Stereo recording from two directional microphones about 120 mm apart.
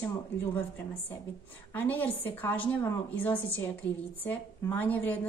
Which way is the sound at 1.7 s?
15° left (ahead or behind).